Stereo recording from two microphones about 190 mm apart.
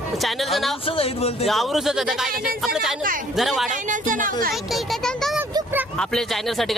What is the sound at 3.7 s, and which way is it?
Speech, 45° right (ahead or behind).